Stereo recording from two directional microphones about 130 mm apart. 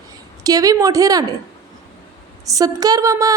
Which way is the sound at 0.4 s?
30° right (ahead or behind).